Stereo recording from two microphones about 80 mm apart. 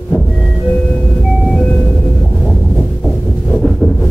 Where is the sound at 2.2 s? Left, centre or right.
Centre.